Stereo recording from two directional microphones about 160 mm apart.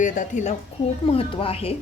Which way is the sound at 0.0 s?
55° left (ahead or behind).